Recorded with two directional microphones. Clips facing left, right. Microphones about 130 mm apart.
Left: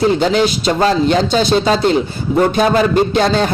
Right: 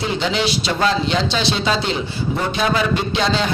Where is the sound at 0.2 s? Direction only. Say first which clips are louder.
Left 6 dB; 45° left (ahead or behind).